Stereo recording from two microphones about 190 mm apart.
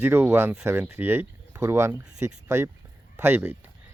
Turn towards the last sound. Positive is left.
turn(degrees=-10)  # may be behind; listen again after turning